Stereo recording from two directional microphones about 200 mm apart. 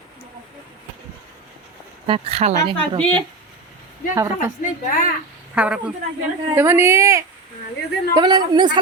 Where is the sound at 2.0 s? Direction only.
30° right (ahead or behind).